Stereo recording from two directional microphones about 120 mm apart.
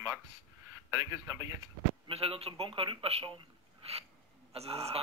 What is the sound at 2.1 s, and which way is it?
Speech, 50° right (ahead or behind).